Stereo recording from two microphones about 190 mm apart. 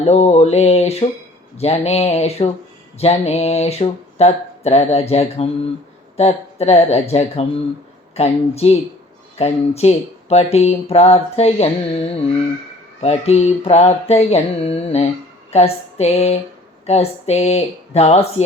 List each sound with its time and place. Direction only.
0.0 s speech: 35° left (ahead or behind)
13.0 s speech: 35° left (ahead or behind)